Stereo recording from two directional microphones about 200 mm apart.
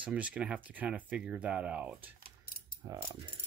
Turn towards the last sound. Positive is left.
turn(degrees=-15)  # may be behind; listen again after turning